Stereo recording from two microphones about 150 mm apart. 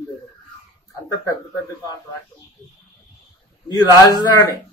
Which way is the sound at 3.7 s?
25° left (ahead or behind).